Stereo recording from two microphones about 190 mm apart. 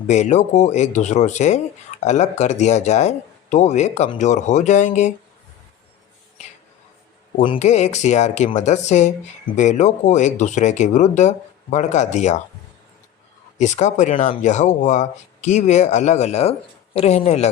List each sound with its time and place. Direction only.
0.1 s speech: 35° left (ahead or behind)
7.4 s speech: 35° left (ahead or behind)
13.6 s speech: 40° left (ahead or behind)